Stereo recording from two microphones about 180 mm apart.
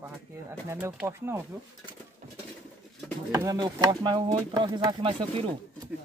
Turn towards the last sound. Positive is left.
turn(degrees=-30)  # may be behind; listen again after turning